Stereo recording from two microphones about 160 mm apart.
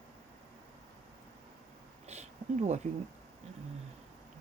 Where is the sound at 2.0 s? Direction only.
45° right (ahead or behind).